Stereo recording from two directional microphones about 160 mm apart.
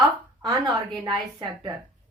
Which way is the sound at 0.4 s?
25° right (ahead or behind).